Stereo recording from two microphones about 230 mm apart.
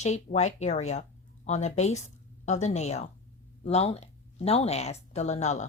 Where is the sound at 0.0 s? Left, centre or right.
Left.